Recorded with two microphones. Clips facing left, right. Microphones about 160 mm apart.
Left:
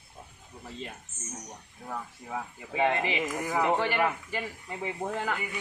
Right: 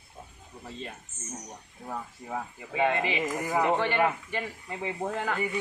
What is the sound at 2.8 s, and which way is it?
Speech, 20° left (ahead or behind).